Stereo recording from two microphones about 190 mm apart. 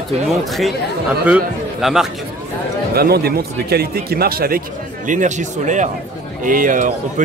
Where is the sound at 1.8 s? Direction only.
Centre (ahead or behind).